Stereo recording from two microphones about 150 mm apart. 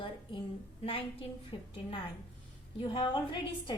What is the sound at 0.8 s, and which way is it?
A woman's voice, 40° left (ahead or behind).